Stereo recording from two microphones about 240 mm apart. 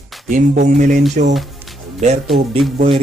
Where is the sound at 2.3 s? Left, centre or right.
Centre.